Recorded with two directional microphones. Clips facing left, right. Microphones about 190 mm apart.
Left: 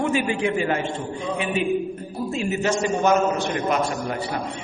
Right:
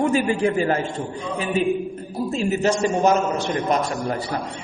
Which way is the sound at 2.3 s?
35° right (ahead or behind).